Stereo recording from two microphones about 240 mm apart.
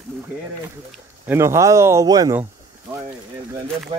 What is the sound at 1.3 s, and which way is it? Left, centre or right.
Speech, centre.